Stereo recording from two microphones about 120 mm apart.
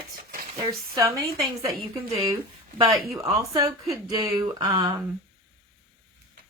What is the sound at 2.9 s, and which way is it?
A woman's voice, 30° right (ahead or behind).